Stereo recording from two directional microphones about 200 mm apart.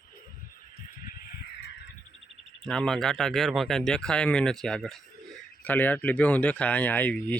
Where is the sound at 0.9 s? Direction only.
45° left (ahead or behind).